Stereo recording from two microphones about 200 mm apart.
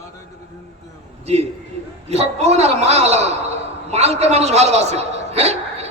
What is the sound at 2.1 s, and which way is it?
A man's voice, 35° right (ahead or behind).